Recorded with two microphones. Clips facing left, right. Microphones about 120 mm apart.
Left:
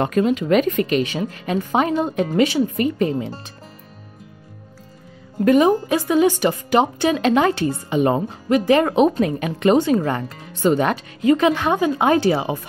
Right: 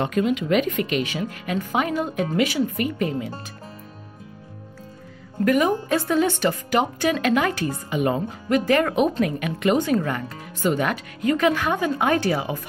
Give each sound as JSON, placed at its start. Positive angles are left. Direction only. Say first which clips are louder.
{"t": 0.0, "sound": "speech", "louder": "left 4 dB", "side_deg": 40}
{"t": 5.4, "sound": "speech", "louder": "left 5 dB", "side_deg": 25}
{"t": 8.5, "sound": "speech", "louder": "left 4 dB", "side_deg": 20}
{"t": 9.8, "sound": "speech", "louder": "left 4 dB", "side_deg": 20}
{"t": 10.0, "sound": "speech", "louder": "left 4 dB", "side_deg": 30}